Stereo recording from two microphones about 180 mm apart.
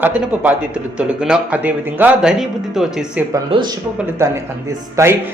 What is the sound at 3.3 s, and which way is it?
Speech, 25° right (ahead or behind).